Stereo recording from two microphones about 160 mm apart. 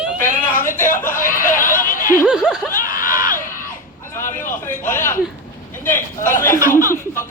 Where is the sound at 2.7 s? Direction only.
60° left (ahead or behind).